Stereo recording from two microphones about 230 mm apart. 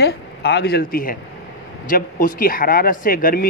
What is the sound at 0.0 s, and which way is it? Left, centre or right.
Speech, left.